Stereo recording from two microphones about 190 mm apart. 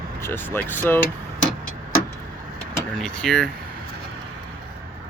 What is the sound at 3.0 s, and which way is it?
Speech, 5° left (ahead or behind).